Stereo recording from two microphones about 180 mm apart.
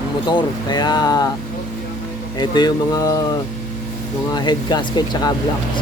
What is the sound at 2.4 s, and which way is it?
Speech, 25° left (ahead or behind).